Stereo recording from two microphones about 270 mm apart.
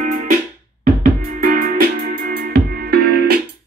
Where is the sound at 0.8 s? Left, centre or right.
Right.